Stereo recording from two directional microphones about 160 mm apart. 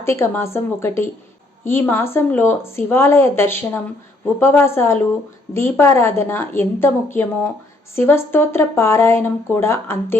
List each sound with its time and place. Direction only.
0.0 s speech: 15° left (ahead or behind)